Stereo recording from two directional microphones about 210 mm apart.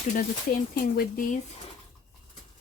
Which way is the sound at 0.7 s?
45° left (ahead or behind).